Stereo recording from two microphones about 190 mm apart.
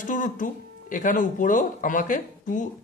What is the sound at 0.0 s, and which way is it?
Speech, 45° left (ahead or behind).